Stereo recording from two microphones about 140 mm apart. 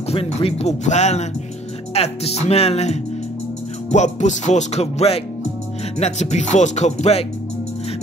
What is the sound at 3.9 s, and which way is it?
Speech, 55° left (ahead or behind).